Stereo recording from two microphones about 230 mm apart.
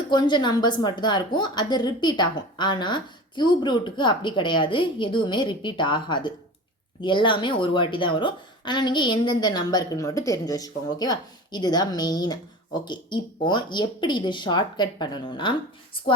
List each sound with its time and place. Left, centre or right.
0.1 s a woman's voice: centre